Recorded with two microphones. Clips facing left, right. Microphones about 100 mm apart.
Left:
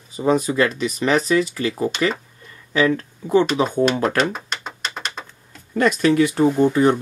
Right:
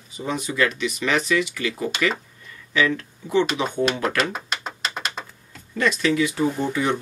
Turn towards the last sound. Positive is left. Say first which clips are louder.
# left 7 dB
turn(degrees=40)  # may be behind; listen again after turning